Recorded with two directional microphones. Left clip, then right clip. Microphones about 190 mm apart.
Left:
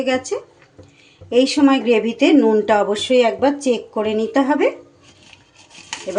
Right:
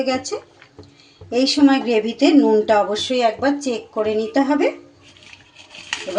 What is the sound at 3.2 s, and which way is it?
Speech, 25° left (ahead or behind).